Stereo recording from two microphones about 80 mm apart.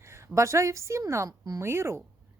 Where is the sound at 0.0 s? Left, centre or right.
Right.